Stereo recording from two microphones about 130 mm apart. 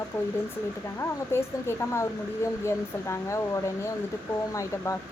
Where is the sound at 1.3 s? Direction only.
20° left (ahead or behind).